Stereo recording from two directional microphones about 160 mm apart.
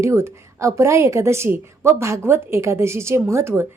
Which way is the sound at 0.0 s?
15° right (ahead or behind).